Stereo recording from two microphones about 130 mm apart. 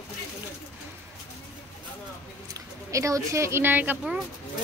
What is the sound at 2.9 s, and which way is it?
A woman's voice, 25° right (ahead or behind).